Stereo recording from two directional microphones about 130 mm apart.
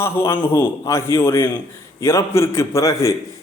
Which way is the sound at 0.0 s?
20° left (ahead or behind).